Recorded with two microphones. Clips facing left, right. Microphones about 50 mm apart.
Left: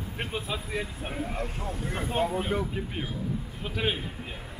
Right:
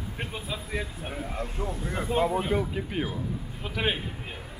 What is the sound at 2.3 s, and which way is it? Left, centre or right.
Speech, centre.